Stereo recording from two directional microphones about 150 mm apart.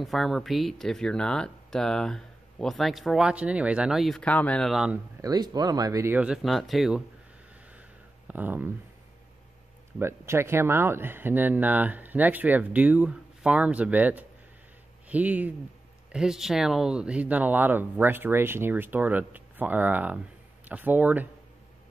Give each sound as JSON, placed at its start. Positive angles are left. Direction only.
{"t": 0.0, "sound": "speech", "side_deg": 0}
{"t": 5.2, "sound": "speech", "side_deg": -25}
{"t": 6.1, "sound": "speech", "side_deg": -5}
{"t": 8.3, "sound": "speech", "side_deg": -10}
{"t": 9.9, "sound": "speech", "side_deg": -15}